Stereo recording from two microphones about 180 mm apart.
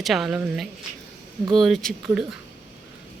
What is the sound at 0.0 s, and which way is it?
Speech, centre (ahead or behind).